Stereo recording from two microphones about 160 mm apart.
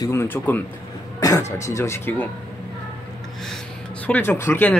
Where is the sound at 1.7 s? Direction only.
15° left (ahead or behind).